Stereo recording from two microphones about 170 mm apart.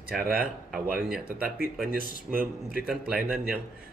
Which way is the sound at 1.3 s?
60° right (ahead or behind).